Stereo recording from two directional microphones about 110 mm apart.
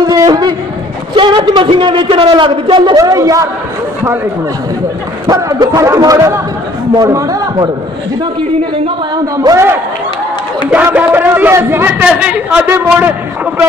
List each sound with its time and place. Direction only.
0.0 s a man's voice: 35° right (ahead or behind)
3.0 s a man's voice: 30° right (ahead or behind)
5.2 s speech: 35° right (ahead or behind)
9.1 s speech: 40° right (ahead or behind)
10.7 s speech: 15° right (ahead or behind)
12.0 s speech: 10° right (ahead or behind)
12.6 s a man's voice: 20° right (ahead or behind)